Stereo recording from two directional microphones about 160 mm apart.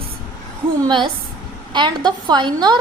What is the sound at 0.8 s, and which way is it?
A woman's voice, 30° right (ahead or behind).